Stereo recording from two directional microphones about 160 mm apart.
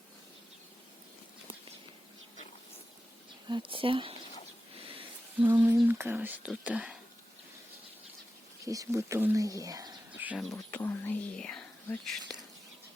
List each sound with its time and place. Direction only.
3.5 s speech: 35° right (ahead or behind)
5.6 s speech: 10° right (ahead or behind)
8.6 s speech: 20° right (ahead or behind)
10.2 s bird: 10° right (ahead or behind)
10.5 s speech: 15° left (ahead or behind)